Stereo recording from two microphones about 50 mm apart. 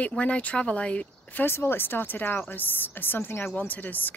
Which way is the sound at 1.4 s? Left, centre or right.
Left.